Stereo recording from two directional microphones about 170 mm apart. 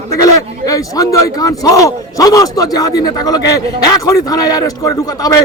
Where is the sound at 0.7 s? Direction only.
20° left (ahead or behind).